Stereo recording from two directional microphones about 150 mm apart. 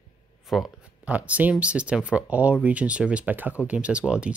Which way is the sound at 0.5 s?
5° right (ahead or behind).